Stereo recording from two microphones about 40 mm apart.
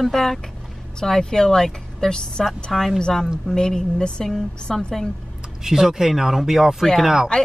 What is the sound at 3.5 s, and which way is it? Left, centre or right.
A woman's voice, centre.